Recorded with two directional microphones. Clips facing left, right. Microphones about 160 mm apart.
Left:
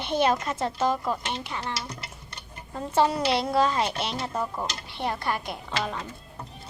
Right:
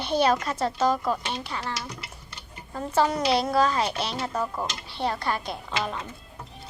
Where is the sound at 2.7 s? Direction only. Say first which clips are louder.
Even; 25° left (ahead or behind).